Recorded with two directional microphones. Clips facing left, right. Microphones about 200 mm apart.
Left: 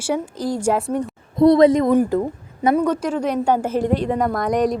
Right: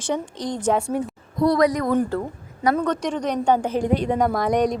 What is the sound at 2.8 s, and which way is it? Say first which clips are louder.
A woman's voice: left 3 dB; 5° left (ahead or behind).